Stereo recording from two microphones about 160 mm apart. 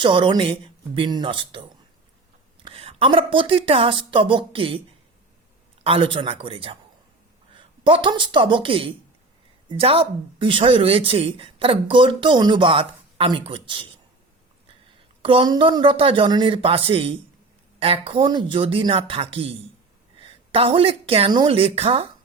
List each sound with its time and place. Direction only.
0.0 s speech: 30° right (ahead or behind)
2.6 s speech: 35° right (ahead or behind)
5.8 s speech: 35° right (ahead or behind)
15.2 s a woman's voice: 35° right (ahead or behind)